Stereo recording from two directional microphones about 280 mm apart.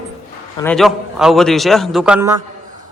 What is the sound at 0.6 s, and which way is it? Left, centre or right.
Speech, centre.